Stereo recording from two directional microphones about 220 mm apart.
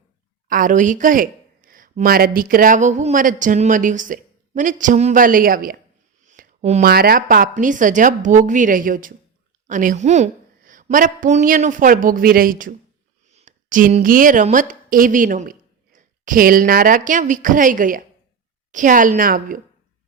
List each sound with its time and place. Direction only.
0.4 s speech: 40° right (ahead or behind)
6.2 s a sound: 40° right (ahead or behind)
6.9 s a woman's voice: 45° right (ahead or behind)